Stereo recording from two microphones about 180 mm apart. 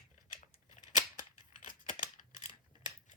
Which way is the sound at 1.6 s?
30° left (ahead or behind).